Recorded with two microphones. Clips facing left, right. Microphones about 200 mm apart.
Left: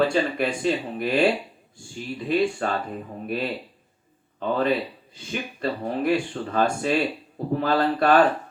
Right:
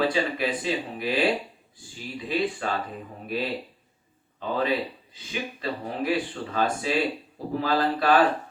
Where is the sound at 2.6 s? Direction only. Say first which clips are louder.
Left 3 dB; 50° left (ahead or behind).